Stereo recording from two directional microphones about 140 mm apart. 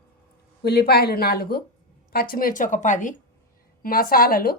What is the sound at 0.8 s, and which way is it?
A woman's voice, 90° left.